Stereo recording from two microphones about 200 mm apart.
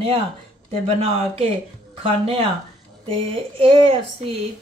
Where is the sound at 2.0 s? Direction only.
30° right (ahead or behind).